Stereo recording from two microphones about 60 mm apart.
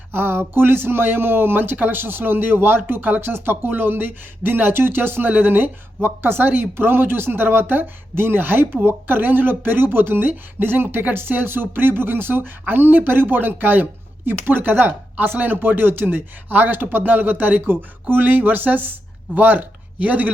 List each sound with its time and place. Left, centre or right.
0.1 s speech: right